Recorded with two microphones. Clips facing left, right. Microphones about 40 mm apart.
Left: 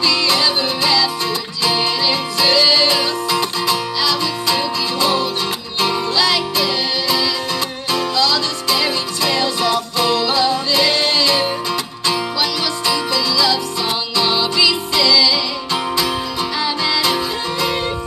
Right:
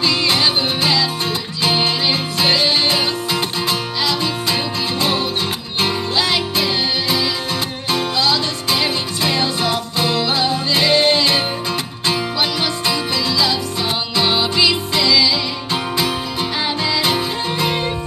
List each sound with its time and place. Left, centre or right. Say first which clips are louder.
0.0 s music: even; right